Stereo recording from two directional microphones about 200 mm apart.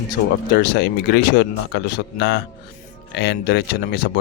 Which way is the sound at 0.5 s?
50° left (ahead or behind).